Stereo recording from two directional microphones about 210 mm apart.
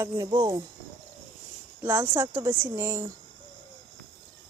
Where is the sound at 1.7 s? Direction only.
10° right (ahead or behind).